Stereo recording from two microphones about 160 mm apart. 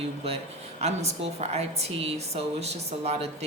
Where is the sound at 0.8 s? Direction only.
45° right (ahead or behind).